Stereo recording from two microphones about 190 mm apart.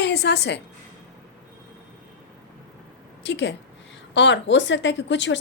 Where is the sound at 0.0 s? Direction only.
65° left (ahead or behind).